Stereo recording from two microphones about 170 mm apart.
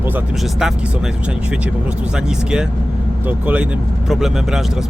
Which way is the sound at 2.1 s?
5° right (ahead or behind).